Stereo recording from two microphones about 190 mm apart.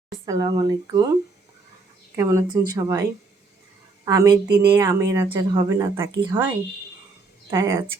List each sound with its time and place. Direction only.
0.3 s a woman's voice: 20° right (ahead or behind)
2.1 s a woman's voice: 15° right (ahead or behind)
7.5 s speech: 15° right (ahead or behind)